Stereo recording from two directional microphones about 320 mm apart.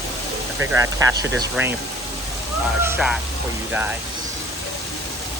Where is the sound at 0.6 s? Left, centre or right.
Centre.